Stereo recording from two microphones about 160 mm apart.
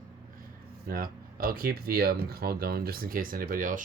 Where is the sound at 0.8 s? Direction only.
65° right (ahead or behind).